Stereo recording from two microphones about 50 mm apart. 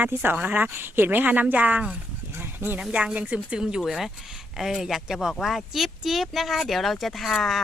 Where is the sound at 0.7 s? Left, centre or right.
Right.